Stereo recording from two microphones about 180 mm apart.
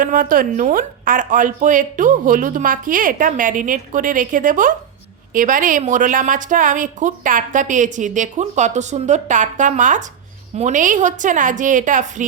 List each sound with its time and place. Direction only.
0.0 s a woman's voice: 50° right (ahead or behind)